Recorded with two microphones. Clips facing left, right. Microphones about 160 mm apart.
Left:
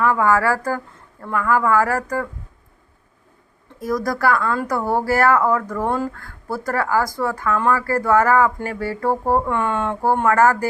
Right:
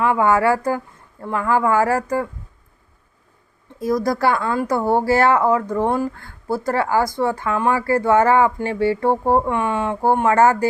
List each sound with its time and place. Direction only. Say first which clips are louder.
0.0 s speech: right 1 dB; 20° right (ahead or behind)
3.8 s speech: right 3 dB; 25° right (ahead or behind)
10.0 s speech: right 1 dB; 25° right (ahead or behind)